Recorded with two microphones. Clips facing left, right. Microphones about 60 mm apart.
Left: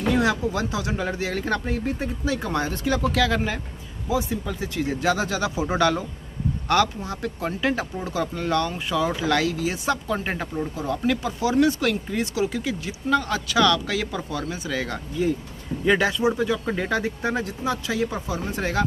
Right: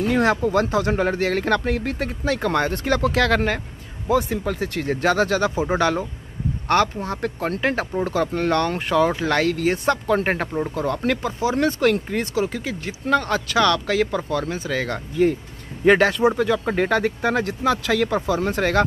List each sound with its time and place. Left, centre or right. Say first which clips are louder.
0.1 s speech: right 3 dB; right
6.7 s speech: right 2 dB; right
11.3 s speech: even; right
11.6 s speech: right 2 dB; right